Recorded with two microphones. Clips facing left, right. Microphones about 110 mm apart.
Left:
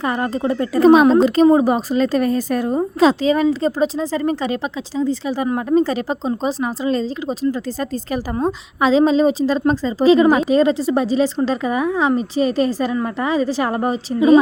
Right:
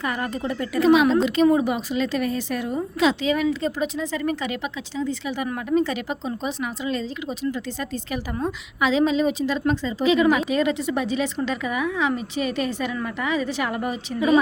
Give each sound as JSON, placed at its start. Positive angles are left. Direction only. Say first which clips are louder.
{"t": 0.0, "sound": "a woman's voice", "louder": "left 6 dB", "side_deg": 30}